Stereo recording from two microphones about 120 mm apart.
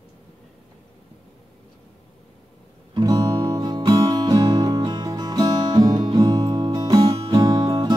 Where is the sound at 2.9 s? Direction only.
30° right (ahead or behind).